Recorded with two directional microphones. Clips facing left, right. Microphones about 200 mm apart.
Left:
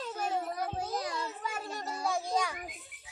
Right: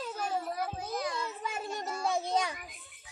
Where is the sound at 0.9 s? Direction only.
35° left (ahead or behind).